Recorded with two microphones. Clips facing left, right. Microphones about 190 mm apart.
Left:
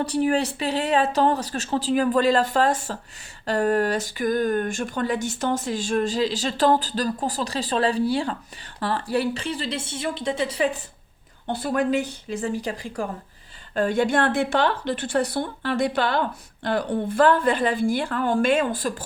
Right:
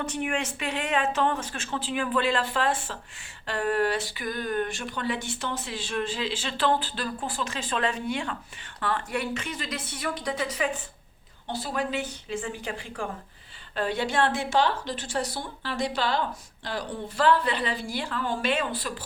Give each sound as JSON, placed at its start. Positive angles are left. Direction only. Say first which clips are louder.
{"t": 0.0, "sound": "speech", "louder": "left 8 dB", "side_deg": 35}
{"t": 11.4, "sound": "a woman's voice", "louder": "left 7 dB", "side_deg": 55}